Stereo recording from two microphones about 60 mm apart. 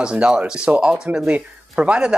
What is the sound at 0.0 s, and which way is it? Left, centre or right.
Speech, centre.